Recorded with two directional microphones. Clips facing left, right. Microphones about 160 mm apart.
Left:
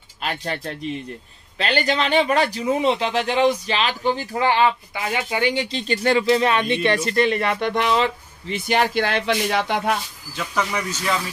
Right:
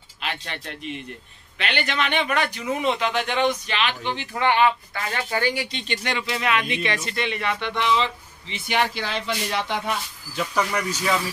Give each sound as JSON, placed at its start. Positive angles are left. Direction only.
{"t": 0.2, "sound": "speech", "side_deg": 40}
{"t": 4.9, "sound": "speech", "side_deg": 15}
{"t": 5.5, "sound": "speech", "side_deg": 30}
{"t": 9.0, "sound": "speech", "side_deg": 65}
{"t": 10.3, "sound": "speech", "side_deg": -10}